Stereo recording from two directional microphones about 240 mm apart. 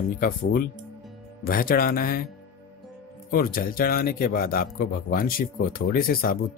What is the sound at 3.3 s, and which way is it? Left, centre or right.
Speech, left.